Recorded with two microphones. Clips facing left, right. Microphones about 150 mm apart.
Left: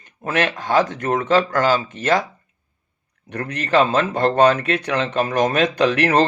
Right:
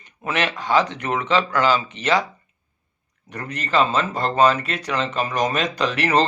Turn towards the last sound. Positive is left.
turn(degrees=55)  # may be behind; listen again after turning